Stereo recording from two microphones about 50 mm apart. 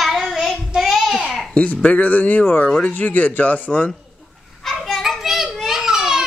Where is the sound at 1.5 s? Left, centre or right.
Left.